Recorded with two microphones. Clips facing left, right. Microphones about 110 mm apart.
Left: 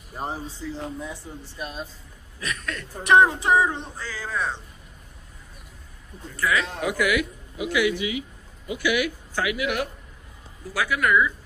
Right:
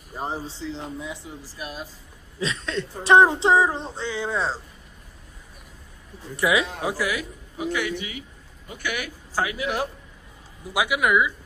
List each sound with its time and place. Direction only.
0.4 s a sound: 30° right (ahead or behind)
1.6 s speech: 5° right (ahead or behind)
2.4 s a sound: 25° right (ahead or behind)
6.4 s speech: 15° right (ahead or behind)
6.8 s a man's voice: 30° right (ahead or behind)
10.7 s speech: 15° right (ahead or behind)